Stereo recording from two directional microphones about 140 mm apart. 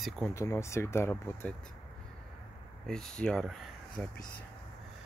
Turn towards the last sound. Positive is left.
turn(degrees=10)  # may be behind; listen again after turning